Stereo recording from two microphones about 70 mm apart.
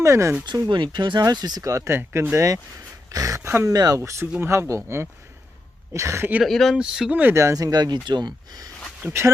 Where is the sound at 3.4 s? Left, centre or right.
Right.